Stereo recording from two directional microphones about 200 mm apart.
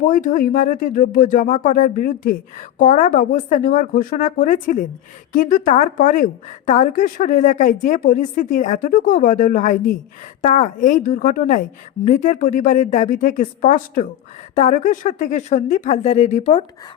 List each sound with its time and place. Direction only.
0.0 s speech: 40° left (ahead or behind)